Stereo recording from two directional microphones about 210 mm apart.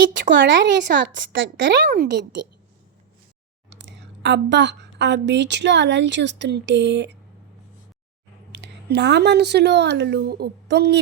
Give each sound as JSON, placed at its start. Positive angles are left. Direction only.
{"t": 0.3, "sound": "speech", "side_deg": -60}
{"t": 1.9, "sound": "a child's voice", "side_deg": -50}
{"t": 3.7, "sound": "a woman's voice", "side_deg": -55}
{"t": 8.5, "sound": "speech", "side_deg": -55}